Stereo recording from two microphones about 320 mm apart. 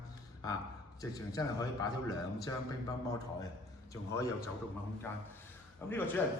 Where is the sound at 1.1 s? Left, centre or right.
Centre.